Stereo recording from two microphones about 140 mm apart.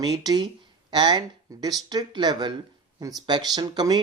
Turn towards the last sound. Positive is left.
turn(degrees=-30)  # may be behind; listen again after turning